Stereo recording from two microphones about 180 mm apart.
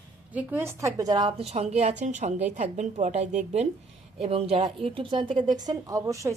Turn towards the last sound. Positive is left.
turn(degrees=-15)  # may be behind; listen again after turning